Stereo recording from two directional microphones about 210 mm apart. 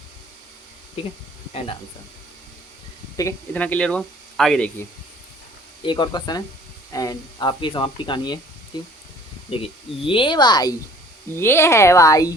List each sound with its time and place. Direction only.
3.2 s speech: 10° left (ahead or behind)
5.8 s speech: 25° left (ahead or behind)
9.5 s speech: 25° left (ahead or behind)